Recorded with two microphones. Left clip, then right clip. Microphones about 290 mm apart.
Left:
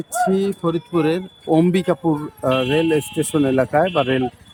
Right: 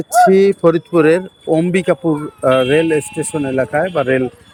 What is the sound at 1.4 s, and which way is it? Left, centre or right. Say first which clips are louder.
Speech: right 2 dB; centre.